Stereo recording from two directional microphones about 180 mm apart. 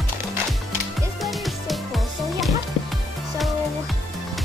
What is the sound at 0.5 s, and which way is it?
Music, centre (ahead or behind).